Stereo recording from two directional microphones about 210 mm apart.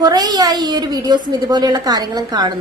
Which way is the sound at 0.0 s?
20° right (ahead or behind).